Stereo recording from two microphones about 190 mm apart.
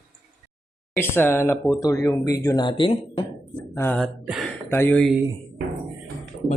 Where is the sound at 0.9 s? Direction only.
10° left (ahead or behind).